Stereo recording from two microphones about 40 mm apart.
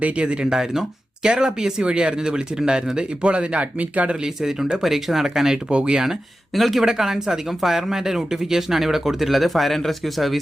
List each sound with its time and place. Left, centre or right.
0.0 s speech: right
0.5 s speech: centre
3.6 s speech: right
4.4 s speech: centre
5.7 s speech: right
6.6 s speech: centre